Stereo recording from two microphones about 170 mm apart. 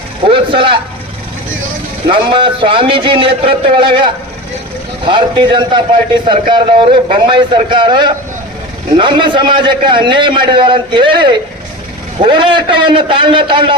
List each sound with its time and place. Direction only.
0.3 s a man's voice: 30° right (ahead or behind)
2.0 s a man's voice: 30° right (ahead or behind)